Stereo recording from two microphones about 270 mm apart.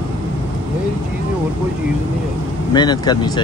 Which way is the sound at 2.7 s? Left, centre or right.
Centre.